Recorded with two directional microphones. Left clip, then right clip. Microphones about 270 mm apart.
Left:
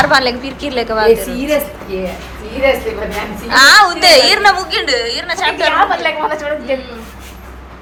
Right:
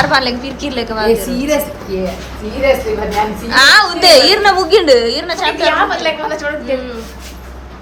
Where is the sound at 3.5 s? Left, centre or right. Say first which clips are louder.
Left 2 dB; centre.